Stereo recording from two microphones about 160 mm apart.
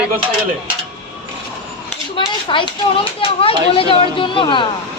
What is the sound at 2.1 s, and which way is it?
A child's voice, 30° left (ahead or behind).